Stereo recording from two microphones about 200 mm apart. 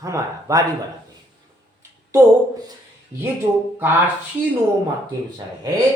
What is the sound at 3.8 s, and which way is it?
Speech, 10° right (ahead or behind).